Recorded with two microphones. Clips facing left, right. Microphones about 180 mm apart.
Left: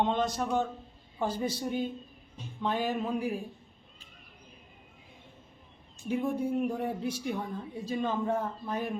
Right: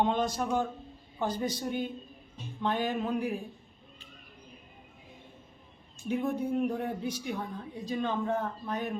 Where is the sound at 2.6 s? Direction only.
5° left (ahead or behind).